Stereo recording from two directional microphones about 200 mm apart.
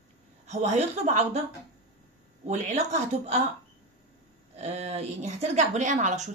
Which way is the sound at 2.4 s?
35° right (ahead or behind).